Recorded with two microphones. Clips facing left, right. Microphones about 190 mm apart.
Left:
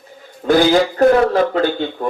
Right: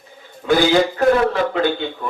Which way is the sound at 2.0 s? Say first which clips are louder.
Left 7 dB; 45° left (ahead or behind).